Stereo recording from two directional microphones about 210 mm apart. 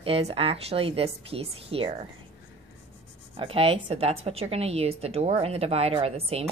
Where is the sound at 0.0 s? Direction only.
30° right (ahead or behind).